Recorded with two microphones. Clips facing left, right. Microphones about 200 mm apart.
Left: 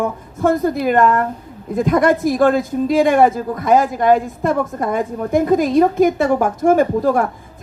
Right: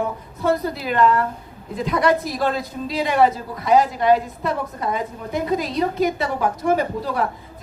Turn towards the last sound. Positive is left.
turn(degrees=50)  # may be behind; listen again after turning